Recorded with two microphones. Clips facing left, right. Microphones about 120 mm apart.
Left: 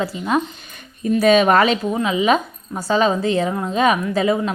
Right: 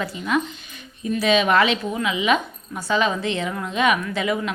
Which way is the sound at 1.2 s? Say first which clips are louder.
Left 4 dB; 45° left (ahead or behind).